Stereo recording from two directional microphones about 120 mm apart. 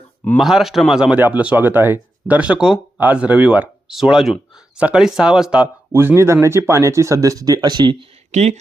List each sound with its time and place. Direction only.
0.3 s a man's voice: centre (ahead or behind)
5.9 s speech: 20° right (ahead or behind); by 7.9 s 35° right (ahead or behind)
8.3 s speech: 70° right (ahead or behind)